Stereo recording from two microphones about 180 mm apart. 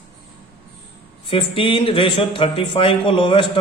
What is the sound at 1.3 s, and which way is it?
A man's voice, 30° left (ahead or behind).